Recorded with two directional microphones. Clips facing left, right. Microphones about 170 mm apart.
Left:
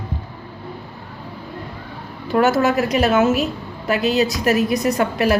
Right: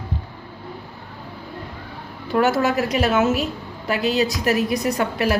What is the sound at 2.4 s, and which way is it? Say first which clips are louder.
Speech: left 2 dB; 50° left (ahead or behind).